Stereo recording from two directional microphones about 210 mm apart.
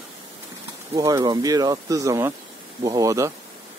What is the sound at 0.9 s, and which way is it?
Speech, 15° right (ahead or behind).